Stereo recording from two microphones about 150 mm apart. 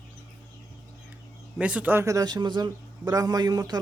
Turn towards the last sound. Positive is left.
turn(degrees=-25)  # may be behind; listen again after turning